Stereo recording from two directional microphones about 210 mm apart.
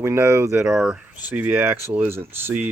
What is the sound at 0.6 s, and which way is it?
Speech, centre (ahead or behind).